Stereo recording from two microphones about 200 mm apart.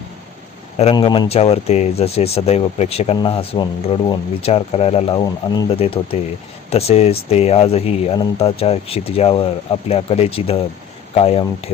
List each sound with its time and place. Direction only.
0.9 s speech: 20° left (ahead or behind)